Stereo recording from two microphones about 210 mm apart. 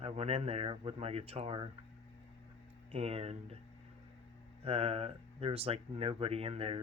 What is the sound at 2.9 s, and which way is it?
Speech, 30° right (ahead or behind).